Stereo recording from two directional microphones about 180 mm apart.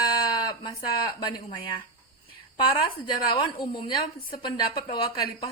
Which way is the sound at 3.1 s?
25° left (ahead or behind).